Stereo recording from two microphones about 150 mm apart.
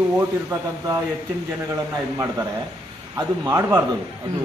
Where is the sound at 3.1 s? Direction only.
25° right (ahead or behind).